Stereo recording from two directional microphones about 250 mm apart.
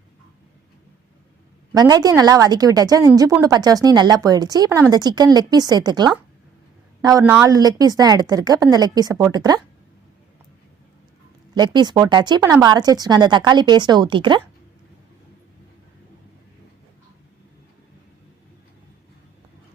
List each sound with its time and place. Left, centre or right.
1.7 s a woman's voice: centre
11.5 s a woman's voice: centre